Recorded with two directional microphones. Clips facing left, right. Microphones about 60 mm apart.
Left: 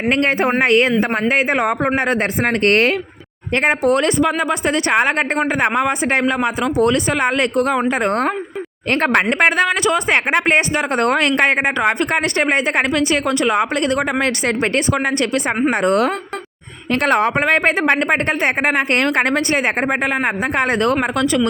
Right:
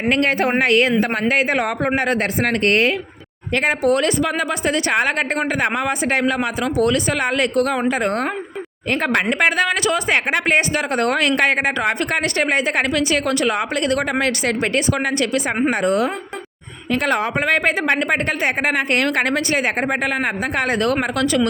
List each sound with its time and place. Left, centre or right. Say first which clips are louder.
0.1 s a woman's voice: left 1 dB; left
2.6 s speech: left 3 dB; left
3.5 s a woman's voice: left 2 dB; left